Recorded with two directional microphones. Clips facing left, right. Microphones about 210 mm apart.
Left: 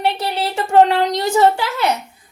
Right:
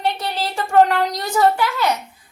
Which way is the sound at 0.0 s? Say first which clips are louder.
Left 3 dB; 30° left (ahead or behind).